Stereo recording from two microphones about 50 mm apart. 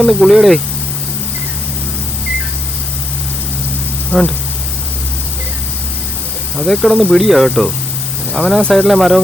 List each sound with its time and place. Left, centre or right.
0.0 s speech: centre
4.1 s speech: left
6.6 s speech: centre